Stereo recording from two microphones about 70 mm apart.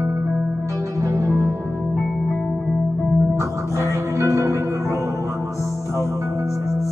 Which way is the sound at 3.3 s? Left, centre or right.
Right.